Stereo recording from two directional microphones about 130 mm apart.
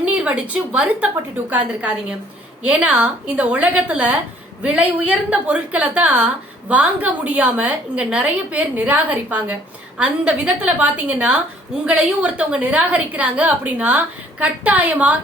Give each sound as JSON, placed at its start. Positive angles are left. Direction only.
{"t": 0.0, "sound": "a woman's voice", "side_deg": -10}